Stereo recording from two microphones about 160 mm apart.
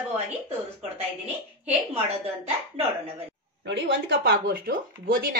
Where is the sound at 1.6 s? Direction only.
40° right (ahead or behind).